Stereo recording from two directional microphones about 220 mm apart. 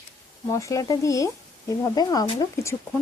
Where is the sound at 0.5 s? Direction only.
15° left (ahead or behind).